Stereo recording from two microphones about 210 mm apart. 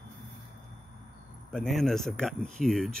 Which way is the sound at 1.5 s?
Centre (ahead or behind).